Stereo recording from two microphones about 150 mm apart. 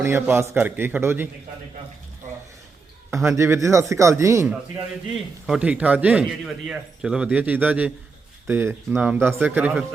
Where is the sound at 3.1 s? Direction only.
20° right (ahead or behind).